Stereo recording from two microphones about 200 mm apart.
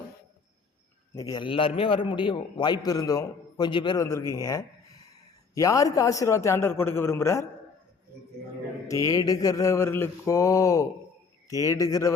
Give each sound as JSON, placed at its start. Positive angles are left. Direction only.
{"t": 1.1, "sound": "a man's voice", "side_deg": 20}
{"t": 9.0, "sound": "a man's voice", "side_deg": 20}